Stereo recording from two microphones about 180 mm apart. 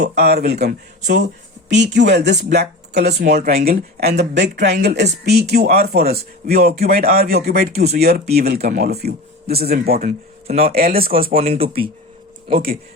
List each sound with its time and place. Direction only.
0.0 s speech: 65° right (ahead or behind)
10.0 s speech: 35° right (ahead or behind)
10.8 s speech: 55° right (ahead or behind)
11.3 s speech: 30° right (ahead or behind)